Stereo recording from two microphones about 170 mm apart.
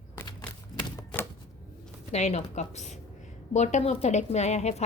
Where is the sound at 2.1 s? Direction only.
40° left (ahead or behind).